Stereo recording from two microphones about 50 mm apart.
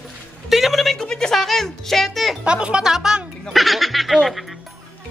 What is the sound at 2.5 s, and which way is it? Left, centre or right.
Speech, centre.